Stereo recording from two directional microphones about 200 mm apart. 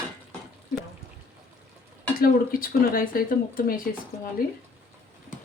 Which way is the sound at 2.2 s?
45° left (ahead or behind).